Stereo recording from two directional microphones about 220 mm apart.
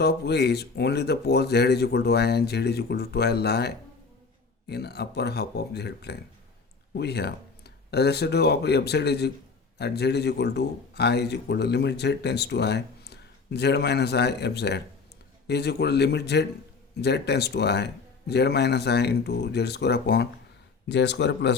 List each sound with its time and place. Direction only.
0.0 s speech: 50° left (ahead or behind)